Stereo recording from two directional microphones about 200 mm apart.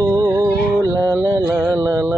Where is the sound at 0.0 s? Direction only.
15° right (ahead or behind).